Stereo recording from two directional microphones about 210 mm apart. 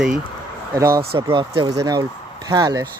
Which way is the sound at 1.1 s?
20° right (ahead or behind).